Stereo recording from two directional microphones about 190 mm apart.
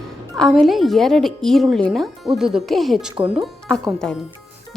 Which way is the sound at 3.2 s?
25° right (ahead or behind).